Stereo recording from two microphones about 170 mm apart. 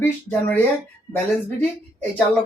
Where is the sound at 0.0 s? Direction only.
10° left (ahead or behind).